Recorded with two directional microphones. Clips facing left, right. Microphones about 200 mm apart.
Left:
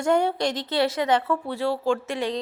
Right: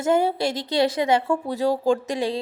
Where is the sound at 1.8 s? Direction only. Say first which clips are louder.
Right 3 dB; 35° right (ahead or behind).